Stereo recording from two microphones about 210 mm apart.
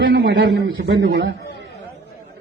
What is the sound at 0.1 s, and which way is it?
A man's voice, 50° right (ahead or behind).